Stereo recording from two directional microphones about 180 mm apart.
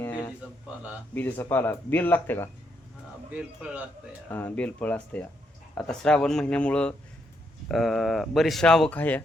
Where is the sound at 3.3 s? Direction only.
5° right (ahead or behind).